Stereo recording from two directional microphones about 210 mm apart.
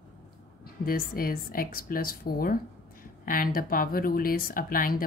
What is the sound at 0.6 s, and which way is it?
Speech, 45° left (ahead or behind).